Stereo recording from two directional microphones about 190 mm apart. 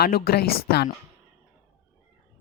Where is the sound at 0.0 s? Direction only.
55° left (ahead or behind).